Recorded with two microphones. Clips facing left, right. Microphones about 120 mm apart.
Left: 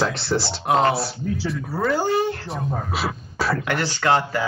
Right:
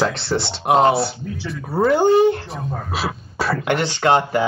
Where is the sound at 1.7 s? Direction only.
25° right (ahead or behind).